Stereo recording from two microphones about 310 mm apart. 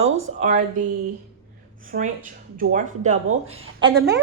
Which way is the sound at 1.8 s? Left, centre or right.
Right.